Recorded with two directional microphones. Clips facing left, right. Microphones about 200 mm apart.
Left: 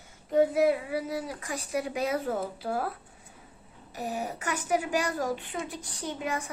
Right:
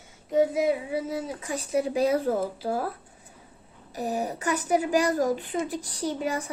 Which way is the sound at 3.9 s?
35° right (ahead or behind).